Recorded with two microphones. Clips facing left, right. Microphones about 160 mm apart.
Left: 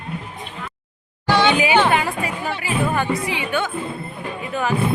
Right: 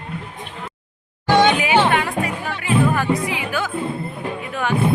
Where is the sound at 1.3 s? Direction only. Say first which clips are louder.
Right 2 dB; 45° right (ahead or behind).